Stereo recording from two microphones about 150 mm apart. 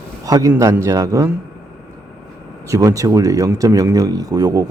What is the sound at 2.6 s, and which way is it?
Speech, 20° right (ahead or behind).